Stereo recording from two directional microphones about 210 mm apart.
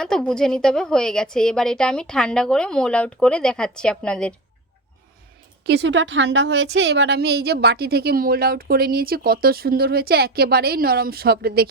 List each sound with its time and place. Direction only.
0.0 s a woman's voice: 5° left (ahead or behind)
5.6 s a woman's voice: 55° right (ahead or behind)